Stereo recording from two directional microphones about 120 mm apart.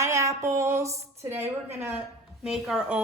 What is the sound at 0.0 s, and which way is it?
A woman's voice, 25° right (ahead or behind).